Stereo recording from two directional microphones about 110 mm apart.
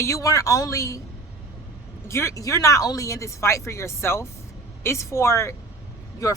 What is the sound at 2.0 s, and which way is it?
Speech, 25° left (ahead or behind).